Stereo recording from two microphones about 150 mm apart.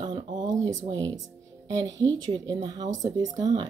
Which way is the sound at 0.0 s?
30° right (ahead or behind).